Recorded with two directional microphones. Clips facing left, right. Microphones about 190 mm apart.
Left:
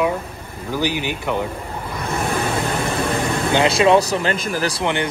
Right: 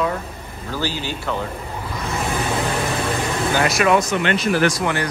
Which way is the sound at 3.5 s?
25° left (ahead or behind).